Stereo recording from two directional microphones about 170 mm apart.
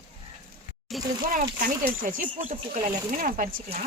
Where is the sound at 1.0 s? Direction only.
Centre (ahead or behind).